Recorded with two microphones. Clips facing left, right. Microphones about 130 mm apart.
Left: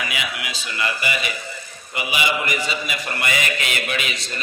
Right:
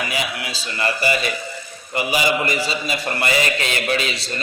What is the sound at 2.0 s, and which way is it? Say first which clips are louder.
A man's voice: right 4 dB; 40° right (ahead or behind).